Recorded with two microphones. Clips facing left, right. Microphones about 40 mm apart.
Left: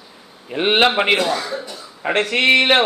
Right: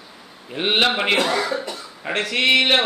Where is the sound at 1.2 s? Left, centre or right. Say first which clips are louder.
Right 1 dB; right.